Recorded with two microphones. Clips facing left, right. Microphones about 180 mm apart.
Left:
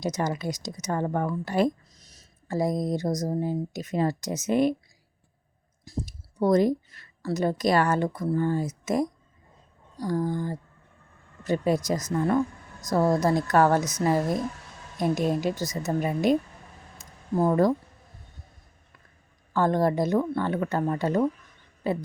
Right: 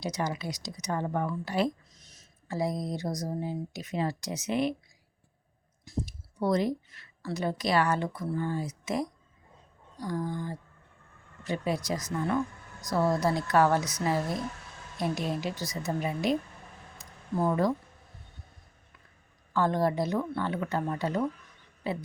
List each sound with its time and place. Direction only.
0.0 s speech: 45° left (ahead or behind)
5.8 s speech: 40° left (ahead or behind)
10.0 s a sound: 40° left (ahead or behind)
11.4 s speech: 45° left (ahead or behind)
17.0 s a sound: 45° left (ahead or behind)
19.5 s speech: 45° left (ahead or behind)